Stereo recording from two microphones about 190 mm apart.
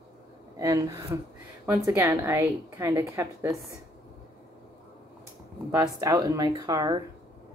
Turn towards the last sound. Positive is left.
turn(degrees=-20)  # may be behind; listen again after turning